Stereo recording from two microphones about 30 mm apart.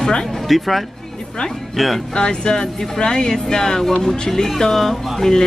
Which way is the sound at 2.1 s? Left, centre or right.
Left.